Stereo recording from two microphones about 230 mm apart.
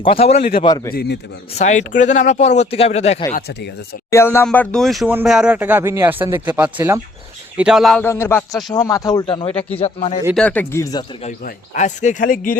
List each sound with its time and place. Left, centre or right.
0.0 s speech: left
0.3 s a man's voice: left
1.5 s speech: left
4.1 s a man's voice: centre; by 10.2 s left
10.3 s a man's voice: centre
11.2 s speech: left